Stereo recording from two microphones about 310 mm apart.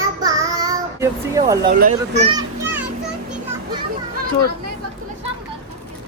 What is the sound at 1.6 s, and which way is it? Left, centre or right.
Speech, right.